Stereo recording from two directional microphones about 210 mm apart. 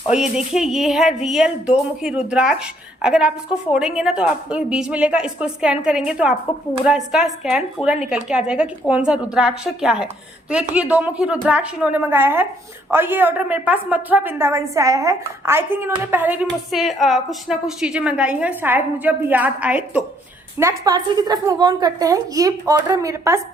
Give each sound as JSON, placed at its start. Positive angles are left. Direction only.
{"t": 0.1, "sound": "a woman's voice", "side_deg": -5}